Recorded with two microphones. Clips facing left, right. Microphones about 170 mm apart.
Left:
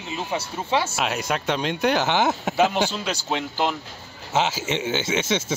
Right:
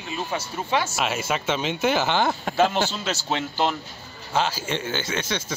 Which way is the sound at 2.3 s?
5° left (ahead or behind).